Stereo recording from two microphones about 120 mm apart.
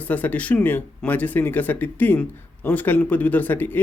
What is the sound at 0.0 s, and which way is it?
Speech, 15° left (ahead or behind).